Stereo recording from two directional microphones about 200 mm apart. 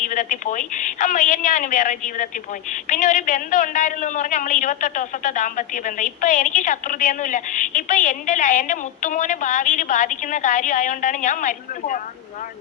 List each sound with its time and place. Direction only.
0.0 s a woman's voice: 40° left (ahead or behind)